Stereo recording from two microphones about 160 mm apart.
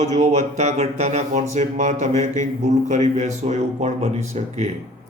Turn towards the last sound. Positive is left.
turn(degrees=-45)  # may be behind; listen again after turning